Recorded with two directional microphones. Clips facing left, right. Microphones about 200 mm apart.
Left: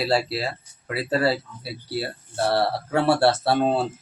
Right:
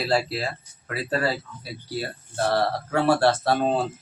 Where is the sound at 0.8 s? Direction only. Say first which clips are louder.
Left 3 dB; 30° left (ahead or behind).